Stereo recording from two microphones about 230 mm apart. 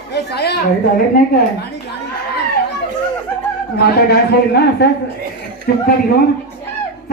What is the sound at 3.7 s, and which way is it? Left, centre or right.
A man's voice, left.